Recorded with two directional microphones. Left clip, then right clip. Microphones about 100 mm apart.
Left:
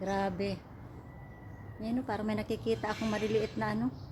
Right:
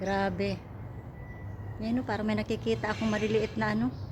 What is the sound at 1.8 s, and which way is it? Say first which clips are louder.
A woman's voice: right 3 dB; 25° left (ahead or behind).